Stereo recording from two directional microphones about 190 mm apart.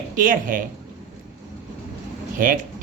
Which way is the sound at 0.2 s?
45° right (ahead or behind).